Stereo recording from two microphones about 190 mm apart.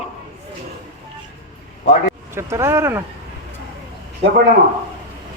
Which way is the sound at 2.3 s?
15° right (ahead or behind).